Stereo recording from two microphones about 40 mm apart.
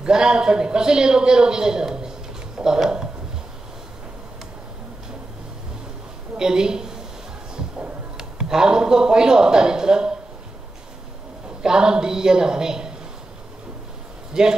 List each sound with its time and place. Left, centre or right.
0.0 s a man's voice: centre
6.3 s a woman's voice: centre
8.2 s a man's voice: centre
11.4 s a woman's voice: centre
14.3 s speech: centre